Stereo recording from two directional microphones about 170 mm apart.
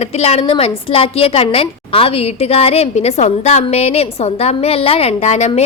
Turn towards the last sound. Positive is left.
turn(degrees=40)  # may be behind; listen again after turning